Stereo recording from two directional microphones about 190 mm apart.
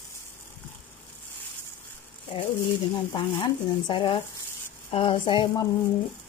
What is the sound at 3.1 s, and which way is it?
Speech, 25° left (ahead or behind).